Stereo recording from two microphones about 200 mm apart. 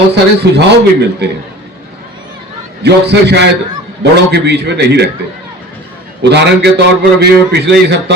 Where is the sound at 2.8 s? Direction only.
55° right (ahead or behind).